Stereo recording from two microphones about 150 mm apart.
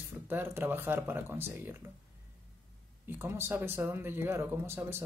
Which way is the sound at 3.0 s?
15° right (ahead or behind).